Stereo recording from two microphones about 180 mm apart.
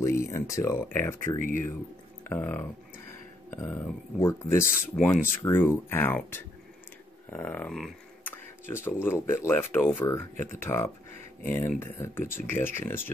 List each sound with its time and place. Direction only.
0.0 s speech: 15° left (ahead or behind)